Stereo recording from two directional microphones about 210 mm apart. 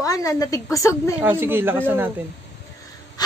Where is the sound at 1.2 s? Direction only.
10° right (ahead or behind).